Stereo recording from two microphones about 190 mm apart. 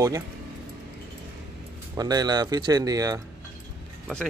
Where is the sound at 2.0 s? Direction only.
20° right (ahead or behind).